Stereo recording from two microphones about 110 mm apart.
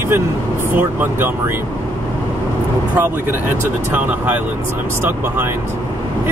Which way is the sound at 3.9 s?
15° right (ahead or behind).